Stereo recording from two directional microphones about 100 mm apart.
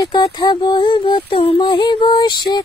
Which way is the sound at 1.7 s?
50° left (ahead or behind).